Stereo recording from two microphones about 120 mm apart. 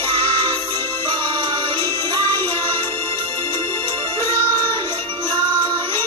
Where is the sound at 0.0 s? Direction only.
45° right (ahead or behind).